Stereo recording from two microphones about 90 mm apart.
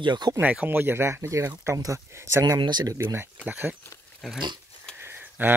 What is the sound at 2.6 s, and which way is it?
Speech, 55° right (ahead or behind).